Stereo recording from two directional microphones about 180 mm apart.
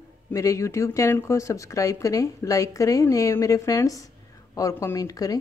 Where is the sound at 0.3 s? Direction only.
15° left (ahead or behind).